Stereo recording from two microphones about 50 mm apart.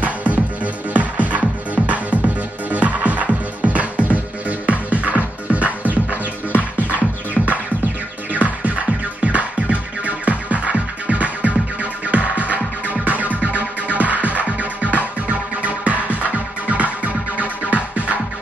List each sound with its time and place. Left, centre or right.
0.0 s music: right
8.3 s music: right